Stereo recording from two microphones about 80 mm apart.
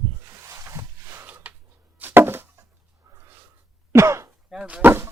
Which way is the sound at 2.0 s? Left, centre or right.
Right.